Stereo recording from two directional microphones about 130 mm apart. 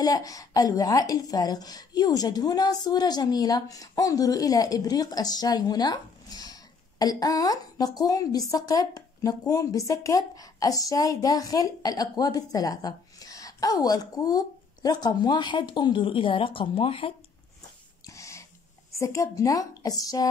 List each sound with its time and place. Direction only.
0.0 s a woman's voice: 25° left (ahead or behind); by 17.1 s 45° left (ahead or behind)
18.0 s a sound: 25° left (ahead or behind)
18.9 s a woman's voice: 25° left (ahead or behind)